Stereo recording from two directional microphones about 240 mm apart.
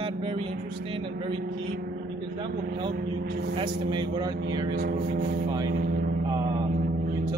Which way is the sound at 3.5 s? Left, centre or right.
Centre.